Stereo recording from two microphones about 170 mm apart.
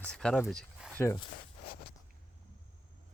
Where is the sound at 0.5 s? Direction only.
5° left (ahead or behind).